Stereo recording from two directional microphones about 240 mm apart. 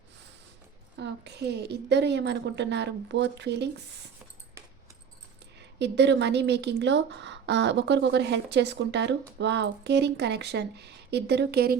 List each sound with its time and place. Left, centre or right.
0.9 s speech: right
5.5 s speech: right